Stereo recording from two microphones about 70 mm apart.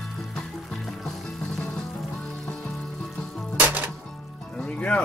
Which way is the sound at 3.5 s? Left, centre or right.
Right.